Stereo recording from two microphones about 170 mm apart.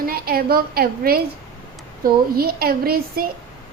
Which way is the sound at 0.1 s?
65° right (ahead or behind).